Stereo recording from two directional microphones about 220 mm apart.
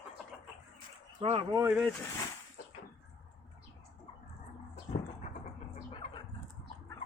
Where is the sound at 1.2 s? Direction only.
25° right (ahead or behind).